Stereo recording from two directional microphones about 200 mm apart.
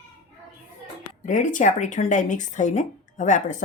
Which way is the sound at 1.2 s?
40° left (ahead or behind).